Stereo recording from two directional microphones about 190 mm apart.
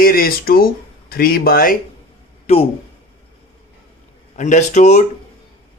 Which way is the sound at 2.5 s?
35° left (ahead or behind).